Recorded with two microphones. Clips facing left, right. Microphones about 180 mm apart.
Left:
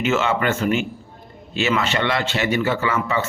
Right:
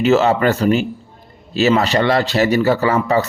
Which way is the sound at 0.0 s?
35° right (ahead or behind).